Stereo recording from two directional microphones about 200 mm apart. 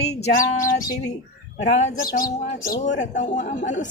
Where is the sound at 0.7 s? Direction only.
45° left (ahead or behind).